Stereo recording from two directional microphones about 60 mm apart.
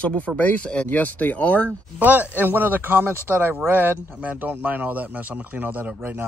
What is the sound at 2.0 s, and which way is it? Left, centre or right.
Speech, right.